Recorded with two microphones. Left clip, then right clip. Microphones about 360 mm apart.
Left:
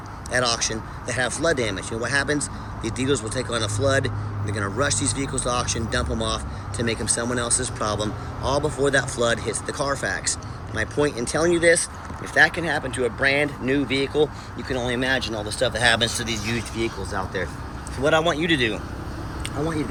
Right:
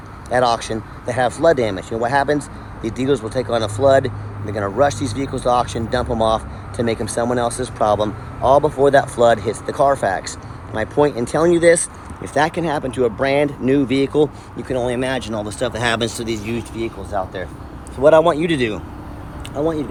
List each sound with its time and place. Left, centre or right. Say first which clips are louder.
0.3 s speech: right 6 dB; centre